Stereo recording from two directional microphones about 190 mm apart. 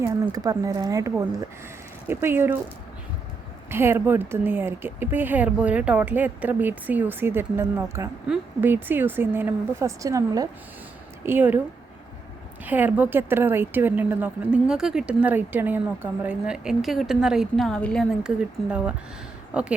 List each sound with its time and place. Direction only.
0.0 s a woman's voice: 20° right (ahead or behind)
3.7 s a woman's voice: 10° right (ahead or behind)
12.6 s a woman's voice: 10° right (ahead or behind)